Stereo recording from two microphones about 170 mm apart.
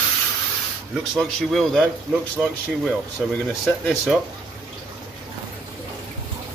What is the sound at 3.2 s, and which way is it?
Speech, centre (ahead or behind).